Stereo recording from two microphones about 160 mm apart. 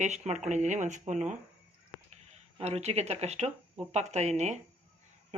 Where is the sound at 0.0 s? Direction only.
45° right (ahead or behind).